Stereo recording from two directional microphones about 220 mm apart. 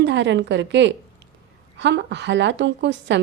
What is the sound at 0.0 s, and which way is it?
A woman's voice, 55° right (ahead or behind).